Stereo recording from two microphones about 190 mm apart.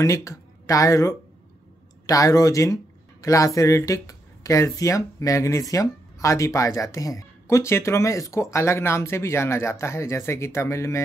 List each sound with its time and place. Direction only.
0.0 s speech: 15° left (ahead or behind)